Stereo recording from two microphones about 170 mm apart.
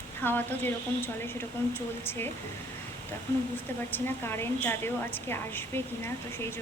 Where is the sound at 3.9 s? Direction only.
15° left (ahead or behind).